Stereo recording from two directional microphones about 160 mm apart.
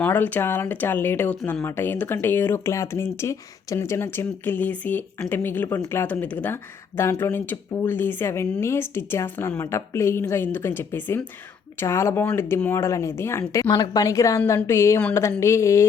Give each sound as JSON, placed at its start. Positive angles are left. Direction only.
{"t": 0.0, "sound": "a woman's voice", "side_deg": 10}